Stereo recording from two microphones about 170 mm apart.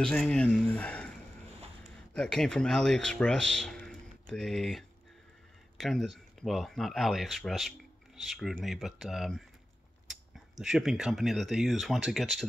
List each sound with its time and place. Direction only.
0.0 s speech: centre (ahead or behind)
2.1 s speech: 5° left (ahead or behind)
10.6 s speech: 5° right (ahead or behind)